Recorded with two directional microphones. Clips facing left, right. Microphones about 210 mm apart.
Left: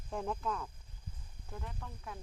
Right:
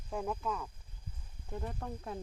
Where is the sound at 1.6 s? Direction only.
45° right (ahead or behind).